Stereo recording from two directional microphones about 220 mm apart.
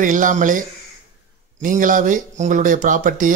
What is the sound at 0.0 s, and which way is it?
Speech, 35° right (ahead or behind).